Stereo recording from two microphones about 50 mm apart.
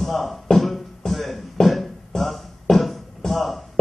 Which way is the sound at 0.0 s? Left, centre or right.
Centre.